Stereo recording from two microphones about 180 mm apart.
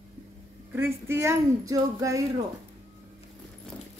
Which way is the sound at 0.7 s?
15° right (ahead or behind).